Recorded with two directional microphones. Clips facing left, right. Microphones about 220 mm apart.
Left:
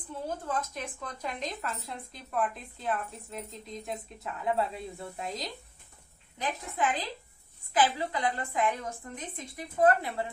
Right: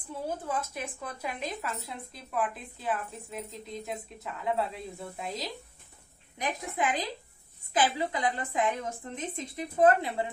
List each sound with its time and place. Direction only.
0.3 s speech: 10° right (ahead or behind)
6.4 s a woman's voice: 15° right (ahead or behind)